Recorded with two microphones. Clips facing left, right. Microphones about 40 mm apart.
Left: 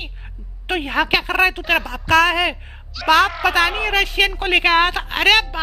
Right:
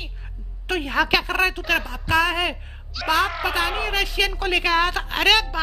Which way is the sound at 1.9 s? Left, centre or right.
Left.